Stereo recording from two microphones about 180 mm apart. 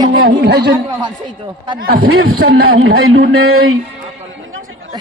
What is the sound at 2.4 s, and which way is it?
Speech, 65° right (ahead or behind).